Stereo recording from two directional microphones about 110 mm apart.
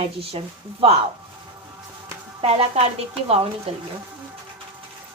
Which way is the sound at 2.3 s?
60° right (ahead or behind).